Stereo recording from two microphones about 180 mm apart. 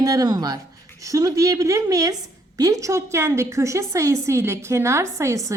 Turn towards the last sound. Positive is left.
turn(degrees=-15)  # may be behind; listen again after turning